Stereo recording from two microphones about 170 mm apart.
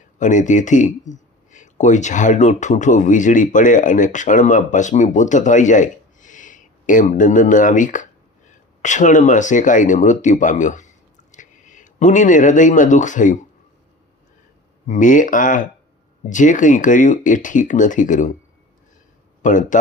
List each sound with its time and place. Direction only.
0.2 s speech: 45° left (ahead or behind)
14.8 s speech: 50° left (ahead or behind)
19.4 s speech: 50° left (ahead or behind)